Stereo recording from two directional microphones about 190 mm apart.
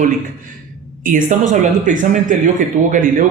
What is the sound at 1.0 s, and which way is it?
A man's voice, 45° right (ahead or behind).